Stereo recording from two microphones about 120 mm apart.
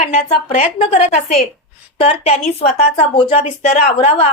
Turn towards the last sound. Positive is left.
turn(degrees=60)  # may be behind; listen again after turning